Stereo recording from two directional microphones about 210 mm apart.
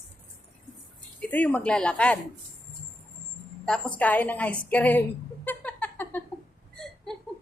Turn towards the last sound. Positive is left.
turn(degrees=0)  # may be behind; listen again after turning